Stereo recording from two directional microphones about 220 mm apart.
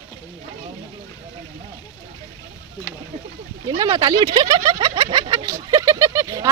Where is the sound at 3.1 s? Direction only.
30° right (ahead or behind).